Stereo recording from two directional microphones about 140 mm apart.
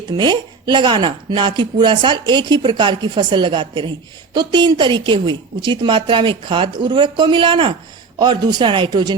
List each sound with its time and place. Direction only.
0.2 s speech: 30° right (ahead or behind)